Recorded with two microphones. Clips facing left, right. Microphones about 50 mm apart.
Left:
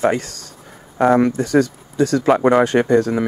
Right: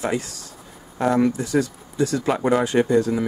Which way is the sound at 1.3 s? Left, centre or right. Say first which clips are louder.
Left 6 dB; left.